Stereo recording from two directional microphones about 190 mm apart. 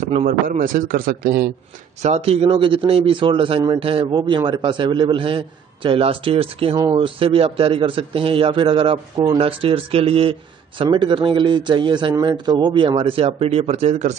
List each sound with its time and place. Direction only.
0.0 s a man's voice: 40° right (ahead or behind)
2.0 s a man's voice: 35° right (ahead or behind)